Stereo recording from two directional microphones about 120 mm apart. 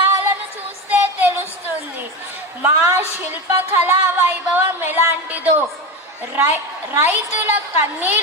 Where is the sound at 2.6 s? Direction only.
20° right (ahead or behind).